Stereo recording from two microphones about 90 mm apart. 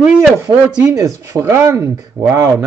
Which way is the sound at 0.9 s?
40° right (ahead or behind).